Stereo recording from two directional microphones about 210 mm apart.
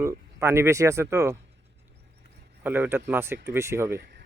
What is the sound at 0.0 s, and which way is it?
Speech, 15° right (ahead or behind).